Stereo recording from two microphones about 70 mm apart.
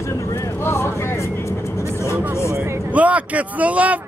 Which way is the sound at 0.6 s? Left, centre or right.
Left.